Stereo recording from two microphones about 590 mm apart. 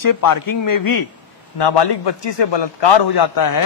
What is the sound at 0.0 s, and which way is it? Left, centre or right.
A man's voice, left.